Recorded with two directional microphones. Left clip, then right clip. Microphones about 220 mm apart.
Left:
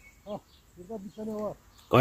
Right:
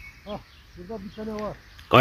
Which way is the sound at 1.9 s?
5° left (ahead or behind).